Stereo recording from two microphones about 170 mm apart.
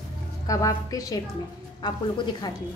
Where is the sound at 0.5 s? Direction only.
20° left (ahead or behind).